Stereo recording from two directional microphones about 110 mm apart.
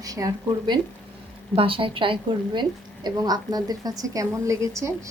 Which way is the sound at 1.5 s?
55° right (ahead or behind).